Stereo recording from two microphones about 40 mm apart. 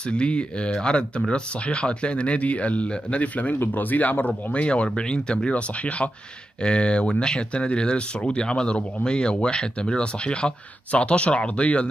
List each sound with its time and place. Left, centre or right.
0.0 s speech: left
3.7 s speech: left
4.5 s speech: left